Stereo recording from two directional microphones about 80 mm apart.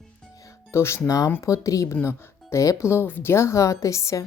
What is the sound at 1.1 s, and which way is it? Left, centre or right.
A woman's voice, left.